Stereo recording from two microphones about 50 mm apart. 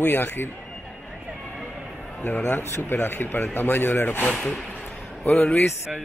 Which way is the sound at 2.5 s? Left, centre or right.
Left.